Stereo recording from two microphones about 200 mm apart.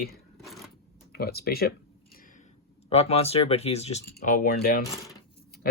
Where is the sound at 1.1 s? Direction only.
50° left (ahead or behind).